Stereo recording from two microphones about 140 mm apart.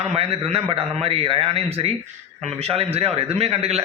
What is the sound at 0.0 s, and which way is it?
A man's voice, 50° right (ahead or behind).